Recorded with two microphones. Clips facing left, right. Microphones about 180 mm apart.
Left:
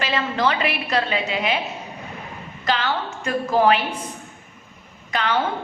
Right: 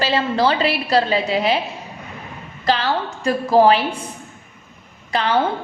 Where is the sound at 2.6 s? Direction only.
35° right (ahead or behind).